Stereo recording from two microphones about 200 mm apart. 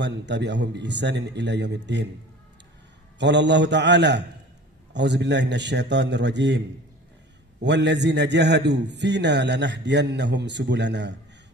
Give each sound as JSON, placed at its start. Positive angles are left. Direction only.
{"t": 0.0, "sound": "a man's voice", "side_deg": -60}
{"t": 3.2, "sound": "a man's voice", "side_deg": -60}
{"t": 7.6, "sound": "a man's voice", "side_deg": -60}